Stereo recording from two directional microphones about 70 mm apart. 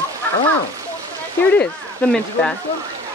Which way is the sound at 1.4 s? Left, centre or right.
Centre.